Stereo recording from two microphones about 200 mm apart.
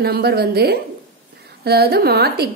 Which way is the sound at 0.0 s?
50° right (ahead or behind).